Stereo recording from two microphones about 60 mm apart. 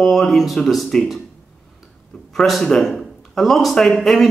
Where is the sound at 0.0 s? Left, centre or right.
Centre.